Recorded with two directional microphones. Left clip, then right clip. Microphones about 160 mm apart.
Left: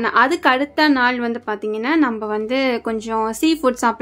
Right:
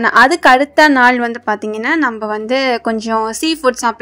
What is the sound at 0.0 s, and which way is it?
Speech, 40° right (ahead or behind).